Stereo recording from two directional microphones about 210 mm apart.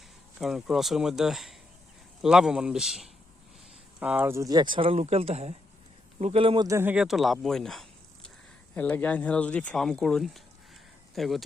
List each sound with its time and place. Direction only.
0.3 s speech: centre (ahead or behind); by 6.7 s 25° right (ahead or behind)
6.7 s speech: 10° right (ahead or behind)